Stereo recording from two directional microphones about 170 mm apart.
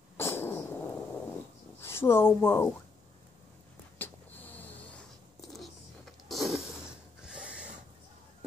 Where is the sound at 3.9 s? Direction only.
10° left (ahead or behind).